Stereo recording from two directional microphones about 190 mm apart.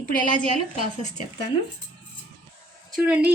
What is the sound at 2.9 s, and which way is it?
Speech, 5° right (ahead or behind).